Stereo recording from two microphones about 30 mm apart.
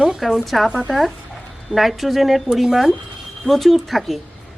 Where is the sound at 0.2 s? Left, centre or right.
Centre.